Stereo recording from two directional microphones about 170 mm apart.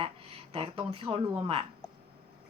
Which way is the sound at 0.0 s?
35° right (ahead or behind).